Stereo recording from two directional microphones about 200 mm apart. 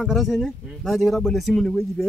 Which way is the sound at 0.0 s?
Centre (ahead or behind).